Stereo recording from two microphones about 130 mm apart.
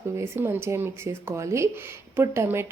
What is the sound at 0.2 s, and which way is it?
Speech, 20° right (ahead or behind).